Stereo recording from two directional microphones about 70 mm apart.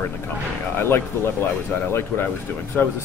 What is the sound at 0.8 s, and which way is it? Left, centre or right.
Speech, left.